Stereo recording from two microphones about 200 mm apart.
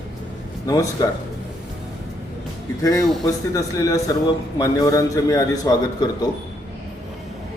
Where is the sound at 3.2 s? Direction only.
15° left (ahead or behind).